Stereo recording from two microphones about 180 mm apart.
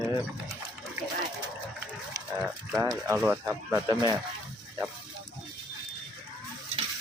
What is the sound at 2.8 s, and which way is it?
Speech, 15° right (ahead or behind).